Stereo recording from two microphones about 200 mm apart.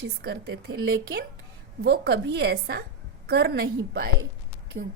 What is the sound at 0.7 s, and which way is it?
Speech, 80° right.